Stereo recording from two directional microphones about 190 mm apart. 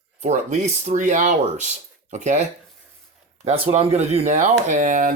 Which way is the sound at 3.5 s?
35° right (ahead or behind).